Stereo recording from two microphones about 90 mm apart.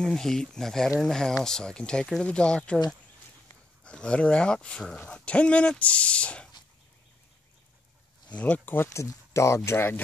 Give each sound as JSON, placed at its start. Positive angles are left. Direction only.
{"t": 0.0, "sound": "speech", "side_deg": 5}
{"t": 3.8, "sound": "speech", "side_deg": 10}
{"t": 8.3, "sound": "speech", "side_deg": 15}